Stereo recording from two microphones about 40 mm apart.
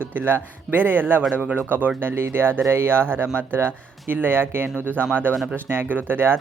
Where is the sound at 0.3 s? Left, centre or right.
Right.